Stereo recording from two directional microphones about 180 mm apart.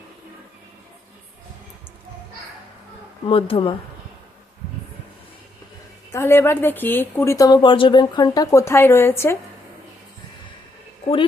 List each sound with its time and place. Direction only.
3.2 s speech: 30° left (ahead or behind)
6.1 s a woman's voice: 15° left (ahead or behind)